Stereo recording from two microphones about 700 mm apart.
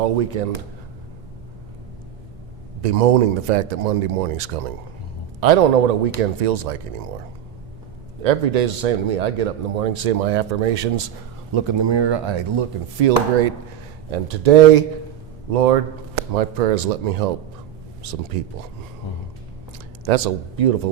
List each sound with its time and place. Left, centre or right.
0.0 s a man's voice: right
2.8 s a man's voice: right
8.2 s speech: right
11.5 s speech: right
13.0 s a man's voice: right
20.1 s speech: right